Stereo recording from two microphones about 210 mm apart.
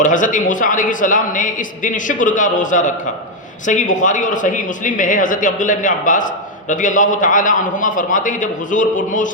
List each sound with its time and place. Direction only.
0.0 s speech: 40° left (ahead or behind)